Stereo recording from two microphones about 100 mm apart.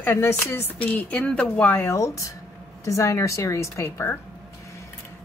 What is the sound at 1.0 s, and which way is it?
Speech, 10° left (ahead or behind).